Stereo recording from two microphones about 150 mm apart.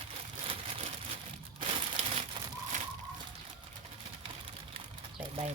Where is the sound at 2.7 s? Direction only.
55° right (ahead or behind).